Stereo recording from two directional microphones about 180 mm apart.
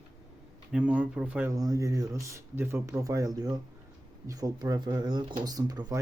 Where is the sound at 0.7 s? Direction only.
10° right (ahead or behind).